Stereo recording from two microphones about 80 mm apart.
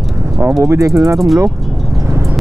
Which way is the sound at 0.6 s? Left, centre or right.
Right.